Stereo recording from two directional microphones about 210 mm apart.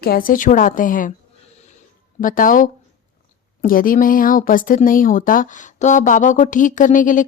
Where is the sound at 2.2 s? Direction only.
40° left (ahead or behind).